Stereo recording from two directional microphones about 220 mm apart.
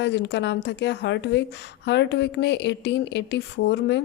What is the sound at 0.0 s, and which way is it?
Speech, 50° left (ahead or behind).